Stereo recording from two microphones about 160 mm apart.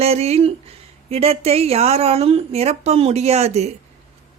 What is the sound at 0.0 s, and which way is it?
Speech, 40° right (ahead or behind).